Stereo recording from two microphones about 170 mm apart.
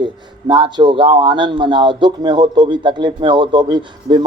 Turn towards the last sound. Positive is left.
turn(degrees=-25)  # may be behind; listen again after turning